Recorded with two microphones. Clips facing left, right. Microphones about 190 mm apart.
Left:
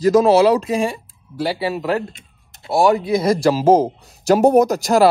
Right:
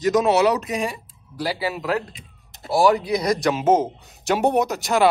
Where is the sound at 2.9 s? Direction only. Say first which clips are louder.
Left 4 dB; 25° left (ahead or behind).